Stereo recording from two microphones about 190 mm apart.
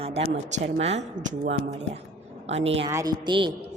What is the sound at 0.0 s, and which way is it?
Speech, 30° right (ahead or behind).